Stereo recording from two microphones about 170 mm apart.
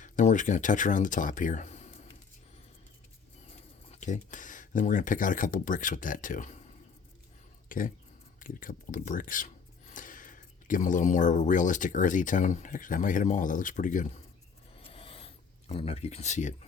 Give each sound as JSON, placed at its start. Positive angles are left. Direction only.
{"t": 0.0, "sound": "speech", "side_deg": 45}
{"t": 4.0, "sound": "speech", "side_deg": 45}
{"t": 7.7, "sound": "speech", "side_deg": 55}
{"t": 14.8, "sound": "a sound", "side_deg": 35}
{"t": 15.7, "sound": "speech", "side_deg": 35}